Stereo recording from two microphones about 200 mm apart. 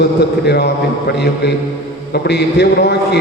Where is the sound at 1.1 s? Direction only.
55° left (ahead or behind).